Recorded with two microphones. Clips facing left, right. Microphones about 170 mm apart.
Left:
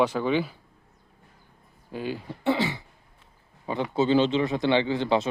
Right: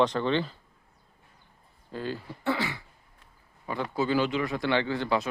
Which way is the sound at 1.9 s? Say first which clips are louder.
Left 2 dB; 15° left (ahead or behind).